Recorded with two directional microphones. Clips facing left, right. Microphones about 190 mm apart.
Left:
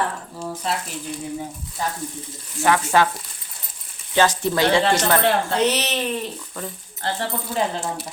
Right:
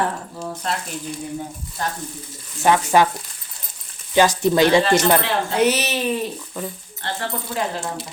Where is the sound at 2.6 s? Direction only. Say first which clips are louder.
Right 2 dB; 20° right (ahead or behind).